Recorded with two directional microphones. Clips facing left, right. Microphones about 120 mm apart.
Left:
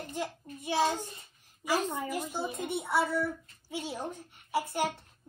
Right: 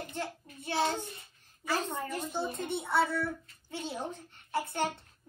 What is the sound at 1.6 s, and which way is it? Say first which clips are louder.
Speech: left 3 dB; 15° left (ahead or behind).